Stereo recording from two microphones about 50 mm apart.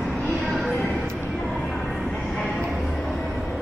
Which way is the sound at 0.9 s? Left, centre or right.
Centre.